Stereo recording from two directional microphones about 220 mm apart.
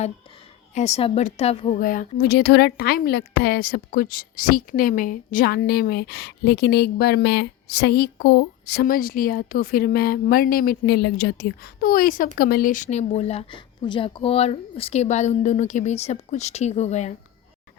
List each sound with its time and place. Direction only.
0.7 s a woman's voice: 30° left (ahead or behind)
1.8 s a woman's voice: 40° left (ahead or behind)